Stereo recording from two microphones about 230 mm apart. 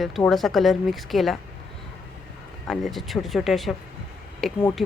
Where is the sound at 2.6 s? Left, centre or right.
Centre.